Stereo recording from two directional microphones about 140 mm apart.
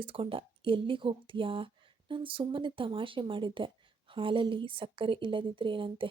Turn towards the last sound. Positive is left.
turn(degrees=-40)  # may be behind; listen again after turning